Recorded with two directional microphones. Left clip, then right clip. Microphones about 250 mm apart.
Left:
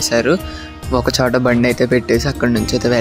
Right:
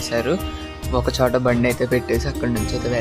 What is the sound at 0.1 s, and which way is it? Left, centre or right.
Speech, centre.